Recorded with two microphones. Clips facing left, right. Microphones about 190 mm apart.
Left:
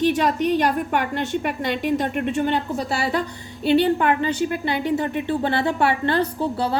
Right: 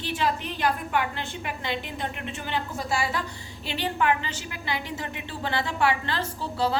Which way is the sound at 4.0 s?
45° left (ahead or behind).